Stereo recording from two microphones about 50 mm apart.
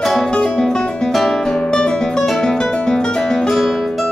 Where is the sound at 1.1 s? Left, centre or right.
Centre.